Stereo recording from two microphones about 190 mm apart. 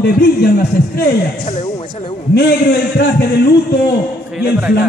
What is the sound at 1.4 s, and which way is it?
Speech, 30° left (ahead or behind).